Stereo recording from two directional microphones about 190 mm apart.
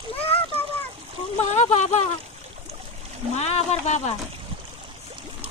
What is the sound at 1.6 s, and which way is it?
Speech, 35° left (ahead or behind).